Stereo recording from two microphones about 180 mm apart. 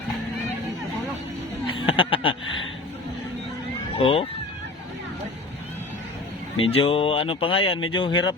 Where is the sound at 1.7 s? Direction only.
30° left (ahead or behind).